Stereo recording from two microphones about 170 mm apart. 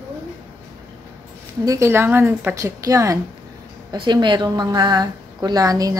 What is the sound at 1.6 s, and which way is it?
A woman's voice, 20° right (ahead or behind).